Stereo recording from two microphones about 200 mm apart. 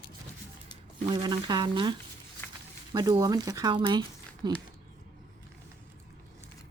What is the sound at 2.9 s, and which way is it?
Speech, 20° right (ahead or behind).